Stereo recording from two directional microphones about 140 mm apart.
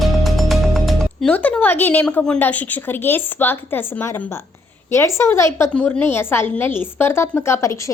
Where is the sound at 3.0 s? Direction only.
15° left (ahead or behind).